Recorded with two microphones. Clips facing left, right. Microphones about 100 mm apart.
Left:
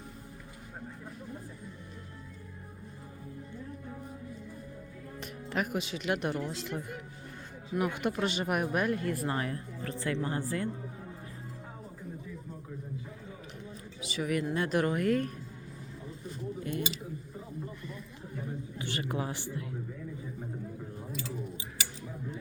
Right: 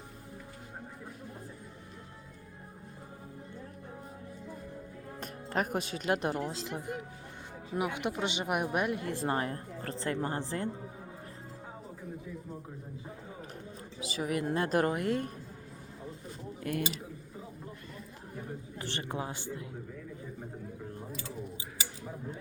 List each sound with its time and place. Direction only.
5.2 s speech: 40° right (ahead or behind)
8.0 s a woman's voice: 20° right (ahead or behind)
14.0 s a sound: 30° right (ahead or behind)
14.5 s speech: 35° right (ahead or behind)
16.6 s speech: 60° right (ahead or behind)
18.8 s a woman's voice: 30° right (ahead or behind)